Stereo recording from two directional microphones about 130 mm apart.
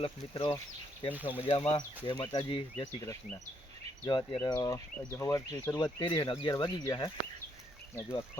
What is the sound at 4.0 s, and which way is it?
Speech, 35° left (ahead or behind).